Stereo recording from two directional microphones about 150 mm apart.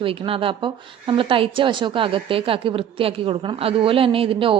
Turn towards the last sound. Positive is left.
turn(degrees=-35)  # may be behind; listen again after turning